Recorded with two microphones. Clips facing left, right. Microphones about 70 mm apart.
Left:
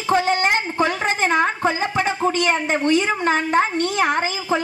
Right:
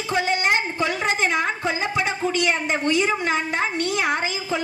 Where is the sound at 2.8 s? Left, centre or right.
Left.